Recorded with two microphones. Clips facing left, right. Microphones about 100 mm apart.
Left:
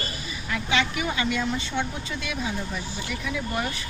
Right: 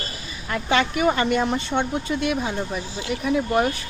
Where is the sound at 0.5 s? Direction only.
45° right (ahead or behind).